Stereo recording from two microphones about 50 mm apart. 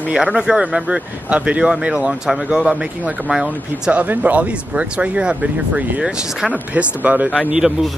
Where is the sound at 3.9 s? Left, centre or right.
Right.